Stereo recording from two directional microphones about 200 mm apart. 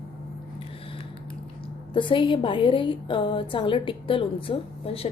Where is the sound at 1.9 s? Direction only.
25° left (ahead or behind).